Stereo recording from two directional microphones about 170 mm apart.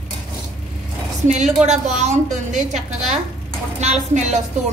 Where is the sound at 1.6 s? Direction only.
40° right (ahead or behind).